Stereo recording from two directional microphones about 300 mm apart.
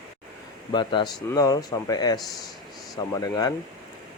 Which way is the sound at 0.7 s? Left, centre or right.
Centre.